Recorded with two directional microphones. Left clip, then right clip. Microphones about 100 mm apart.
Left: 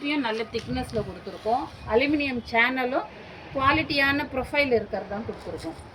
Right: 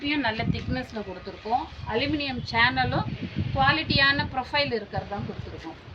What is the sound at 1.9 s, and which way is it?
A woman's voice, 35° right (ahead or behind).